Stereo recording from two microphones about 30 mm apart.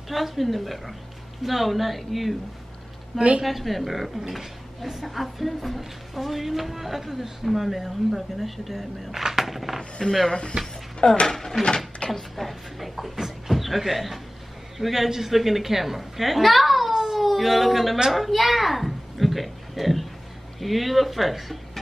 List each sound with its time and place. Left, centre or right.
0.1 s a woman's voice: centre
3.2 s a woman's voice: right
3.4 s a woman's voice: centre
4.4 s speech: centre
5.0 s a woman's voice: centre
10.0 s speech: centre
11.0 s speech: left
11.6 s a sound: left
12.1 s a woman's voice: centre
16.9 s baby cry: right
17.2 s a child's voice: centre